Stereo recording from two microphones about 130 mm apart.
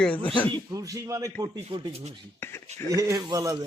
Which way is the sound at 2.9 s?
25° right (ahead or behind).